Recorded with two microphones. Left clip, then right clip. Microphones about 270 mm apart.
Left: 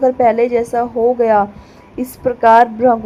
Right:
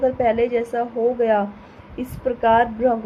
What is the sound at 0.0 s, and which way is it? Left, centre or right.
A woman's voice, centre.